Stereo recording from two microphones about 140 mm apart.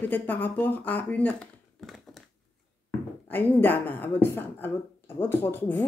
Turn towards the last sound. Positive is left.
turn(degrees=15)  # may be behind; listen again after turning